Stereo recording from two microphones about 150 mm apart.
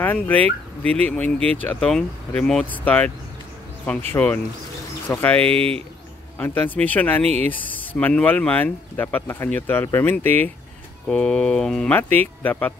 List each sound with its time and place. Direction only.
0.0 s speech: 10° left (ahead or behind)
4.1 s speech: 10° left (ahead or behind)
5.5 s speech: 40° right (ahead or behind)
6.3 s speech: 10° left (ahead or behind)